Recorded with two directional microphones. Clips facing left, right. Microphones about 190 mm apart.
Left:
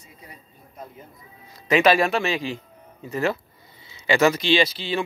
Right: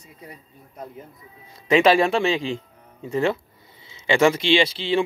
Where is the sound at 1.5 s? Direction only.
25° right (ahead or behind).